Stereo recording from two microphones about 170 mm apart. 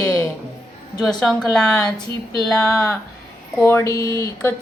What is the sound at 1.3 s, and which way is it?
Speech, 5° left (ahead or behind).